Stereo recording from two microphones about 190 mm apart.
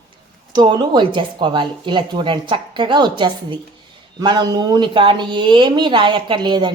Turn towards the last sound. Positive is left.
turn(degrees=-25)  # may be behind; listen again after turning